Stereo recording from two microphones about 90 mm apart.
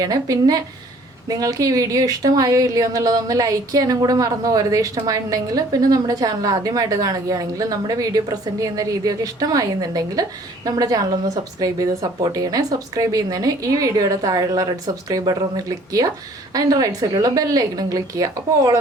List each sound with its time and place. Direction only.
0.0 s speech: 45° right (ahead or behind)